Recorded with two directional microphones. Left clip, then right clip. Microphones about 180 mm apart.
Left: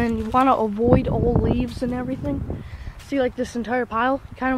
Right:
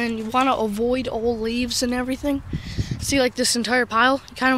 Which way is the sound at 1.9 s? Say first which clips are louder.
Right 3 dB; 15° right (ahead or behind).